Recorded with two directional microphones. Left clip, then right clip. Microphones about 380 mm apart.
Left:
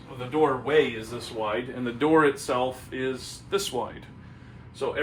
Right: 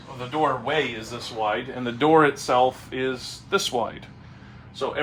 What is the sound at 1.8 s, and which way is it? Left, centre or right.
Speech, centre.